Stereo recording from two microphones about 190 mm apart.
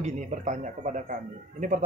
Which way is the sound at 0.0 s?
40° right (ahead or behind).